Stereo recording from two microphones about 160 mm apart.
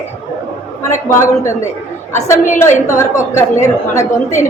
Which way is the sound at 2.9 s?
15° left (ahead or behind).